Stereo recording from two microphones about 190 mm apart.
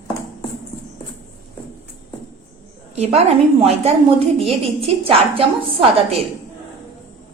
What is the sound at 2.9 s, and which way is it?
A woman's voice, 35° right (ahead or behind).